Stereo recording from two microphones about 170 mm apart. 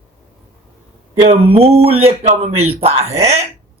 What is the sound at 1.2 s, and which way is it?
Speech, 35° right (ahead or behind).